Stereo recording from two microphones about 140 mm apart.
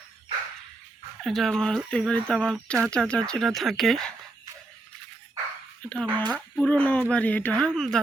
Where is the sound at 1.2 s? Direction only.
Centre (ahead or behind).